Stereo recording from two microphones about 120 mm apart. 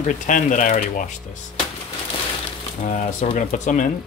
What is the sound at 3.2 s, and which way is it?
Speech, 90° left.